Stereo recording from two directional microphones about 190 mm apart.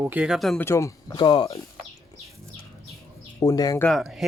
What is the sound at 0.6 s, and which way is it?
Speech, 15° left (ahead or behind).